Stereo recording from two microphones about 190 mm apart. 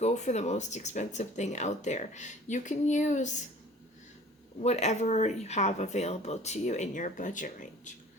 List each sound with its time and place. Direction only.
0.0 s speech: 35° left (ahead or behind)
4.6 s speech: 35° left (ahead or behind)